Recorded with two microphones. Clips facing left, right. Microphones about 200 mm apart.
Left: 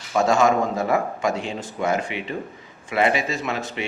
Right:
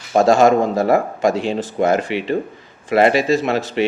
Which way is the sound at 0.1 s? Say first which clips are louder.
Right 6 dB; 30° right (ahead or behind).